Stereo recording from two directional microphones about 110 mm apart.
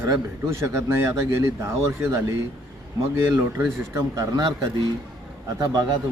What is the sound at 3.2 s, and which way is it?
Speech, 25° right (ahead or behind).